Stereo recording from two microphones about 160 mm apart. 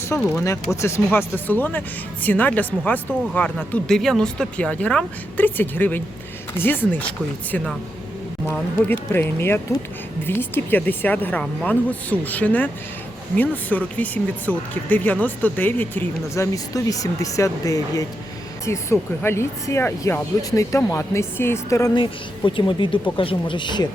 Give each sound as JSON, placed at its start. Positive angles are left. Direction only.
{"t": 0.3, "sound": "speech", "side_deg": 15}
{"t": 21.9, "sound": "speech", "side_deg": 30}